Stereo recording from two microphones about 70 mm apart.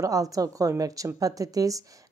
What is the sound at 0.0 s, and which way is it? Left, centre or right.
Speech, right.